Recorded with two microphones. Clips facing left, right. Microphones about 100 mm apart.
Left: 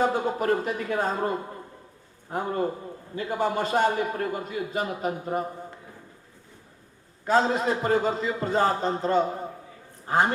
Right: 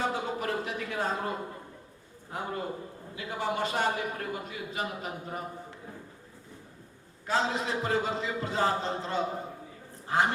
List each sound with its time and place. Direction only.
0.0 s speech: 45° left (ahead or behind)
2.3 s a man's voice: 45° left (ahead or behind)
7.3 s a man's voice: 45° left (ahead or behind)